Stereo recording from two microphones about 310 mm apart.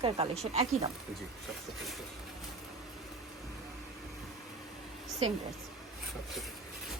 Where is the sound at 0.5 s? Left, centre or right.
Centre.